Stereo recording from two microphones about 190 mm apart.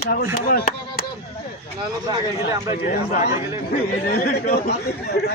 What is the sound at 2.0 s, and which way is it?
Speech, 20° right (ahead or behind).